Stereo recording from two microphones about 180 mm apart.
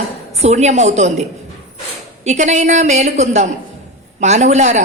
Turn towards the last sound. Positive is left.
turn(degrees=-40)  # may be behind; listen again after turning